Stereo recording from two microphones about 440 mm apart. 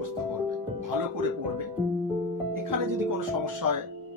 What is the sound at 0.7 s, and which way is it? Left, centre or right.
Speech, right.